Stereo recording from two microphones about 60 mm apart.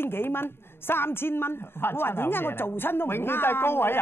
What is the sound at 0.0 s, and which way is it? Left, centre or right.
A woman's voice, left.